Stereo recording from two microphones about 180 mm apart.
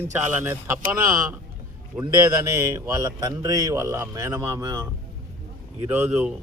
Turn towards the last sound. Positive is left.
turn(degrees=-5)  # may be behind; listen again after turning